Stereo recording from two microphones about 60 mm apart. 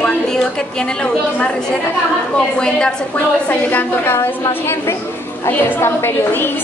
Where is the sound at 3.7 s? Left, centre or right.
Left.